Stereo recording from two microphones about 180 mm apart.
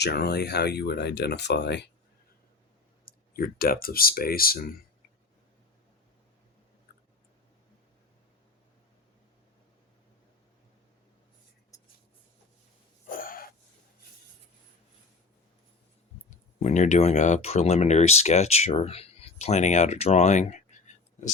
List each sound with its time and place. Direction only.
0.0 s speech: 65° left (ahead or behind)
3.1 s speech: 55° left (ahead or behind)
11.7 s writing: 20° left (ahead or behind)
13.1 s a sound: 50° left (ahead or behind)
16.6 s speech: 40° left (ahead or behind)